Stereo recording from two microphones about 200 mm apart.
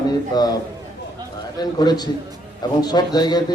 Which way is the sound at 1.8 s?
20° left (ahead or behind).